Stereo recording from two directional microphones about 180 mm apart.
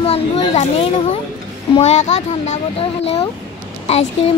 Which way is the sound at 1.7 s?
40° left (ahead or behind).